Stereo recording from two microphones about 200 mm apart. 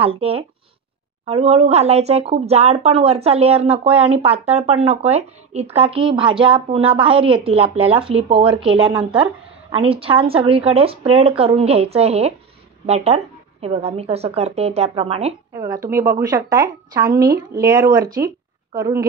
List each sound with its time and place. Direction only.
0.2 s speech: 30° right (ahead or behind)
15.5 s a woman's voice: 15° right (ahead or behind)
18.2 s a sound: 15° right (ahead or behind)